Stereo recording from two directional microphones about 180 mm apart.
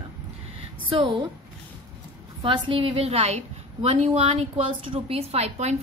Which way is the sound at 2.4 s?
25° right (ahead or behind).